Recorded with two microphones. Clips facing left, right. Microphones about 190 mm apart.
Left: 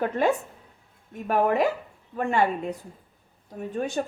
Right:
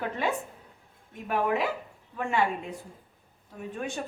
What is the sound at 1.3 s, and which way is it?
Speech, 45° left (ahead or behind).